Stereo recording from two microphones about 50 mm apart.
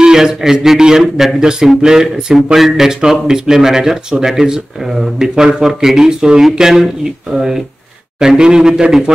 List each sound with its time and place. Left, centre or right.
0.0 s speech: centre
5.3 s a man's voice: centre
5.6 s speech: centre
8.2 s speech: centre